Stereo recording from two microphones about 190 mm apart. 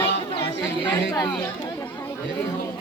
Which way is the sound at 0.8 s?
25° left (ahead or behind).